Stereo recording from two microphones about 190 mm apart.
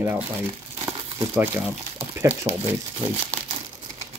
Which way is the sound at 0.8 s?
10° right (ahead or behind).